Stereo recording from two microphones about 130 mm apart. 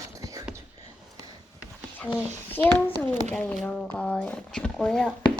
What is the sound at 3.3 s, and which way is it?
Speech, 5° left (ahead or behind).